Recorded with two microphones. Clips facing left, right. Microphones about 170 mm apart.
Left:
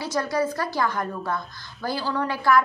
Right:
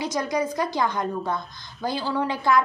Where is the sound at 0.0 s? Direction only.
15° right (ahead or behind).